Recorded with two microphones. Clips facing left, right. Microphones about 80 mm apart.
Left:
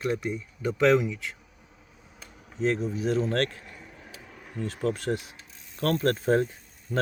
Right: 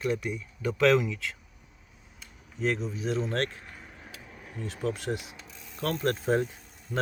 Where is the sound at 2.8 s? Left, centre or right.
Left.